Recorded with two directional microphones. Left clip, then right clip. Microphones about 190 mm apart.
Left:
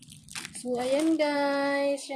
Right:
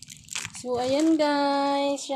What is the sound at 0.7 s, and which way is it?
Speech, 35° right (ahead or behind).